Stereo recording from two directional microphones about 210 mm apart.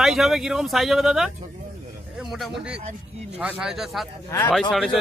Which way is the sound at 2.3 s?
5° right (ahead or behind).